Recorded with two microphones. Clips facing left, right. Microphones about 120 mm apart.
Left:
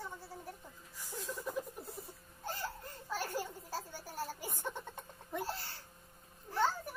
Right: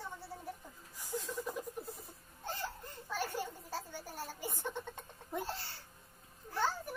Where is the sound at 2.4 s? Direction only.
10° left (ahead or behind).